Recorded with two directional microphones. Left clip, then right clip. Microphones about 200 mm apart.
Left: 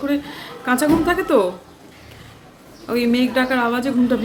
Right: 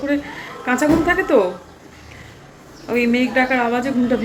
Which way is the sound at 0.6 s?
15° left (ahead or behind).